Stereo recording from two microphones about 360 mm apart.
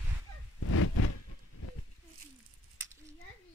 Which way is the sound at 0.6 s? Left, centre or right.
Left.